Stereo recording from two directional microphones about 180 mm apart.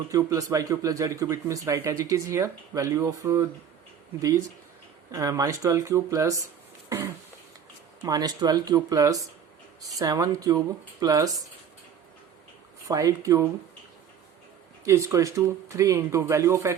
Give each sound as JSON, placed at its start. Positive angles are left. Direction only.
{"t": 0.1, "sound": "speech", "side_deg": -15}
{"t": 8.0, "sound": "speech", "side_deg": -20}
{"t": 12.9, "sound": "speech", "side_deg": -20}
{"t": 14.8, "sound": "speech", "side_deg": -15}